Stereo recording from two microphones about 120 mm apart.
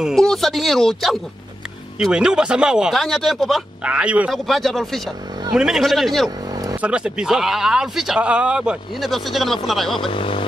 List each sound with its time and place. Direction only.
0.0 s speech: 5° left (ahead or behind)
3.9 s a man's voice: 10° right (ahead or behind)
4.3 s speech: centre (ahead or behind)
6.5 s vehicle: 30° right (ahead or behind)
6.8 s speech: 10° right (ahead or behind)
10.1 s vehicle: 45° left (ahead or behind)